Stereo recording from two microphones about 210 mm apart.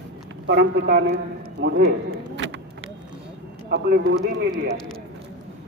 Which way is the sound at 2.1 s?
65° right (ahead or behind).